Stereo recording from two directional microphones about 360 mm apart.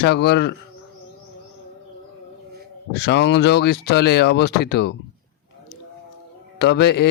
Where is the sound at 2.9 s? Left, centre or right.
Left.